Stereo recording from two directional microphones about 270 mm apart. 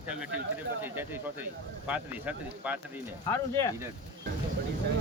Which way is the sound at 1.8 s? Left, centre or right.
Centre.